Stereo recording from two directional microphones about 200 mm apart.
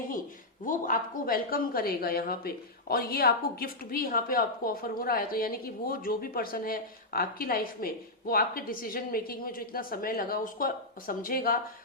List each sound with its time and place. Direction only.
0.6 s speech: 40° left (ahead or behind)